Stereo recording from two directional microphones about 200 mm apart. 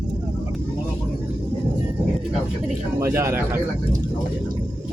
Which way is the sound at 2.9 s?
15° right (ahead or behind).